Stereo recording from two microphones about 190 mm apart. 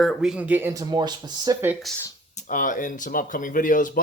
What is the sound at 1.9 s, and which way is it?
Speech, centre (ahead or behind).